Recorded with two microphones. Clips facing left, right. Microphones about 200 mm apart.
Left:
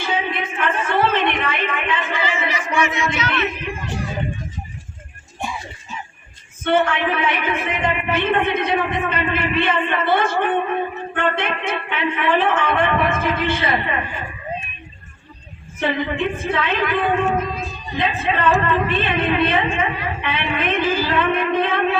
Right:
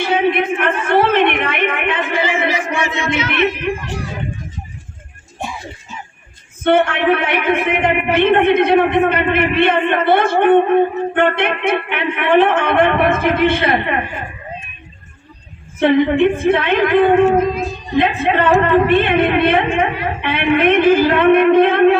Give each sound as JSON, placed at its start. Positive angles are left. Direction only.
{"t": 0.0, "sound": "a sound", "side_deg": -65}
{"t": 3.6, "sound": "speech", "side_deg": -70}
{"t": 6.7, "sound": "a man's voice", "side_deg": -65}
{"t": 15.8, "sound": "a man's voice", "side_deg": -65}
{"t": 16.9, "sound": "speech", "side_deg": -55}
{"t": 18.0, "sound": "a man's voice", "side_deg": -60}